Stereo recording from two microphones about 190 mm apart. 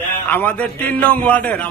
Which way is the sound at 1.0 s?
5° left (ahead or behind).